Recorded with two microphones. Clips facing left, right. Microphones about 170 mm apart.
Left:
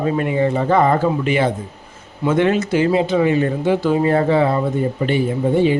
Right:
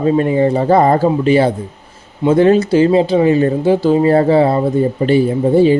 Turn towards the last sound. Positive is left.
turn(degrees=-35)  # may be behind; listen again after turning